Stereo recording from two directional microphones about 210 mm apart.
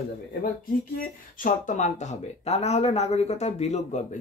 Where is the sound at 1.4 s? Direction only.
40° left (ahead or behind).